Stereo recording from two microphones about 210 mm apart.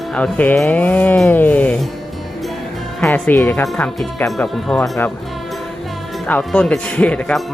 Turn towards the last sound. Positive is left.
turn(degrees=5)  # may be behind; listen again after turning